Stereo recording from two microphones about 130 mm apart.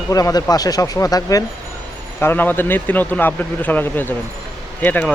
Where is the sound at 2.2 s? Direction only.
15° left (ahead or behind).